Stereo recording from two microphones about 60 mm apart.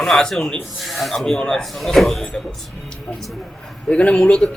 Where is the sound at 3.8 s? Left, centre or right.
Centre.